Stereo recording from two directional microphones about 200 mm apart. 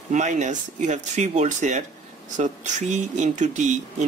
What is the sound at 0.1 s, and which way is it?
Speech, 35° right (ahead or behind).